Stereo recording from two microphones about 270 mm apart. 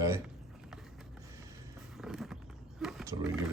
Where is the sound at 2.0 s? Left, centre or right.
Centre.